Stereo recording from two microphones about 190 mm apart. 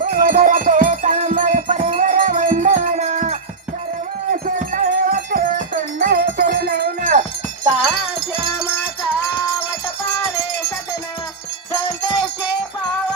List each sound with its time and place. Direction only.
0.2 s music: 45° right (ahead or behind)
4.3 s wind chime: 45° right (ahead or behind)
7.9 s wind chime: 5° right (ahead or behind)
11.7 s wind chime: 5° left (ahead or behind)